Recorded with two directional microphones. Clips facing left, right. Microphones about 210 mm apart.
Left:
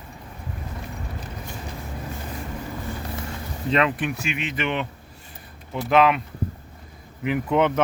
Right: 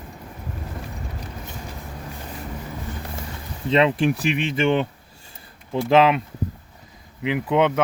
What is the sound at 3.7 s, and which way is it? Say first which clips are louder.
Speech: right 4 dB; 25° right (ahead or behind).